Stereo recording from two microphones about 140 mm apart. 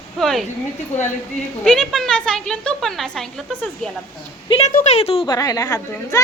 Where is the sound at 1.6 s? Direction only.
5° left (ahead or behind).